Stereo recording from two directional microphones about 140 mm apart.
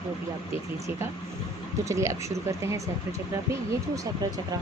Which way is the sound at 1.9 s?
20° right (ahead or behind).